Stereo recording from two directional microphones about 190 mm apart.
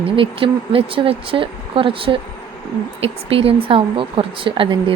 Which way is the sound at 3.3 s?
30° right (ahead or behind).